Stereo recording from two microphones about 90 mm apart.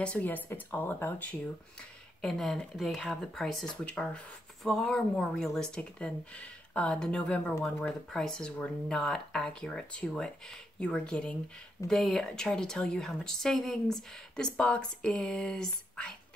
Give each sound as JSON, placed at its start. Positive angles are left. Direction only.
{"t": 0.0, "sound": "speech", "side_deg": 15}
{"t": 1.8, "sound": "a woman's voice", "side_deg": 5}